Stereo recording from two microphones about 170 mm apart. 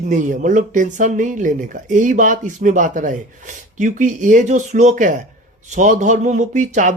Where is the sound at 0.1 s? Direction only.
50° right (ahead or behind).